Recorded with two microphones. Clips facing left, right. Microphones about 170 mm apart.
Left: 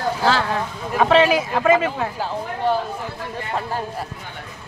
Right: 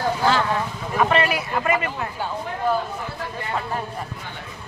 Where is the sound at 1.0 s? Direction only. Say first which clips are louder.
Left 6 dB; 90° left.